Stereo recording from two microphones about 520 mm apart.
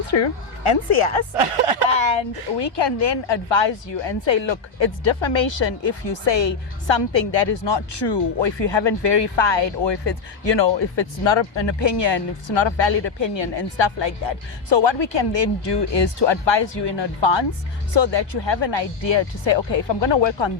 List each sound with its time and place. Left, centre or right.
0.6 s speech: left
1.4 s speech: right
1.9 s a woman's voice: left